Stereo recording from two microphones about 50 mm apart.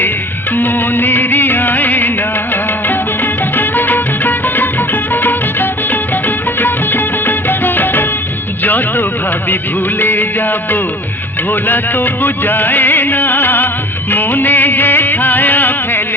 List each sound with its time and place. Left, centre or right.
0.5 s music of bollywood: left
3.5 s music: left